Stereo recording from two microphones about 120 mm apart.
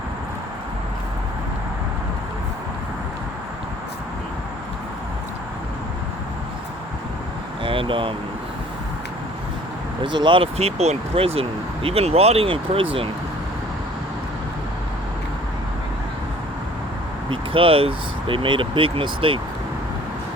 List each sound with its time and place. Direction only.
7.6 s vehicle: 45° right (ahead or behind)
10.0 s speech: 40° right (ahead or behind)
17.2 s speech: 50° right (ahead or behind)